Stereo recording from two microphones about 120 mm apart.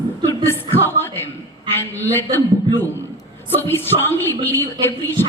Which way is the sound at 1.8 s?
20° left (ahead or behind).